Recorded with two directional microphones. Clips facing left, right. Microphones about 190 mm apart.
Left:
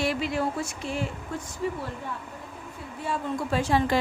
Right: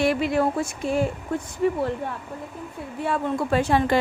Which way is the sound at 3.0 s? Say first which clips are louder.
Right 5 dB; 60° right (ahead or behind).